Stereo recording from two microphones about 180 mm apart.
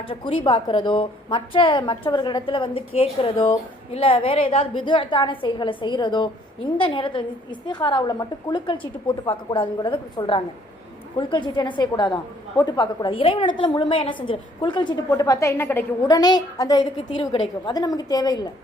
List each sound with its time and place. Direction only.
0.0 s a woman's voice: 30° left (ahead or behind)